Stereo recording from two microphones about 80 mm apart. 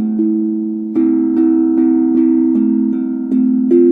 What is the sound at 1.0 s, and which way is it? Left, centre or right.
Music, centre.